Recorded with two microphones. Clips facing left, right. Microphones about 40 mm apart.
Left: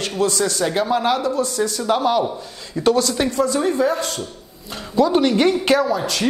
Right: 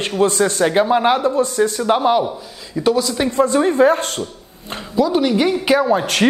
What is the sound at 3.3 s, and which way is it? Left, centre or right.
Speech, right.